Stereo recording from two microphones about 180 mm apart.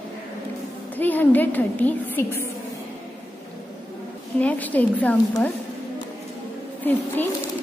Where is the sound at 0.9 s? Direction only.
10° left (ahead or behind).